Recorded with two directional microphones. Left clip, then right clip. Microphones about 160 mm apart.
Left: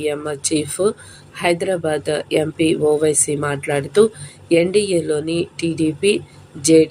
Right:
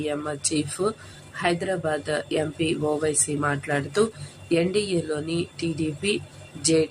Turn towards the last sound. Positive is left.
turn(degrees=20)  # may be behind; listen again after turning